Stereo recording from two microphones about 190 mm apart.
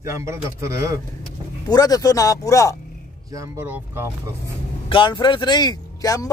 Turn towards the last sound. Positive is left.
turn(degrees=20)  # may be behind; listen again after turning